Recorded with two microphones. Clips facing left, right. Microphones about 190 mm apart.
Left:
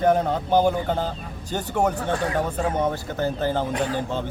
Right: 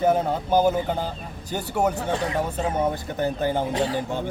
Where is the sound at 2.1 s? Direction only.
20° right (ahead or behind).